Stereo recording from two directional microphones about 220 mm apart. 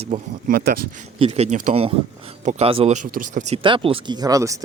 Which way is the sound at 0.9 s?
30° right (ahead or behind).